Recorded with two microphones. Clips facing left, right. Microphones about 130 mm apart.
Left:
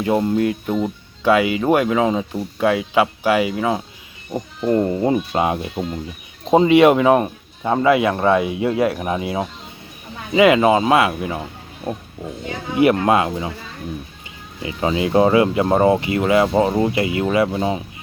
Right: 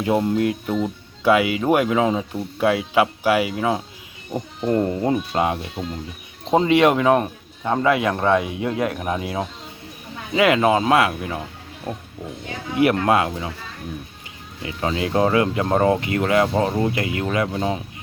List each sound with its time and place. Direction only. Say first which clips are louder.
0.0 s a man's voice: left 2 dB; 5° right (ahead or behind)
13.0 s a man's voice: left 2 dB; centre (ahead or behind)
14.6 s speech: left 4 dB; 10° left (ahead or behind)